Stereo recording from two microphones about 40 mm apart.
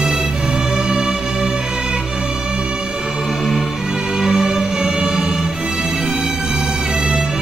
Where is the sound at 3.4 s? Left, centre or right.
Centre.